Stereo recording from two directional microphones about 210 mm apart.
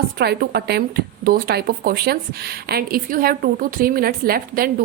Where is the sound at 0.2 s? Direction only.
50° right (ahead or behind).